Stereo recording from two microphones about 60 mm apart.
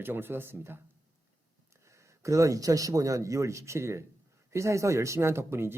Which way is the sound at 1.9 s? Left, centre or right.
Right.